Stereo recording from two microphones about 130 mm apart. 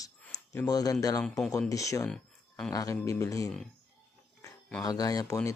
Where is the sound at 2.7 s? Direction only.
25° left (ahead or behind).